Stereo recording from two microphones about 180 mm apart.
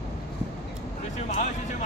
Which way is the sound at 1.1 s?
40° left (ahead or behind).